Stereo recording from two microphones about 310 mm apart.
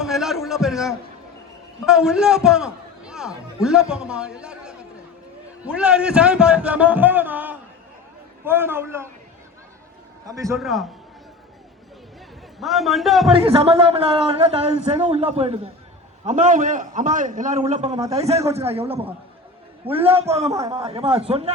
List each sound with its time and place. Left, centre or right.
0.0 s a sound: centre
1.8 s a man's voice: centre
10.2 s a man's voice: centre
12.5 s a man's voice: centre
13.3 s a man's voice: centre